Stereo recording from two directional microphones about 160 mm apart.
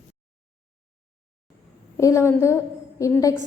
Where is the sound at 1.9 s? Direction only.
20° left (ahead or behind).